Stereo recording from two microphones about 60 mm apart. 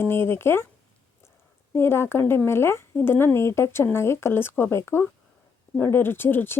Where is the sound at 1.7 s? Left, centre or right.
Left.